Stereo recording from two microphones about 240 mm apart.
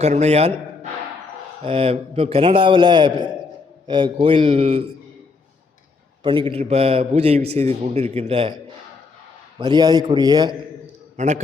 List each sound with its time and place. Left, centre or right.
0.0 s a man's voice: right
6.2 s a man's voice: right
9.6 s a man's voice: centre
11.2 s a man's voice: right